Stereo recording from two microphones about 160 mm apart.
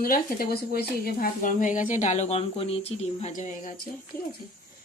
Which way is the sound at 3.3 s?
50° left (ahead or behind).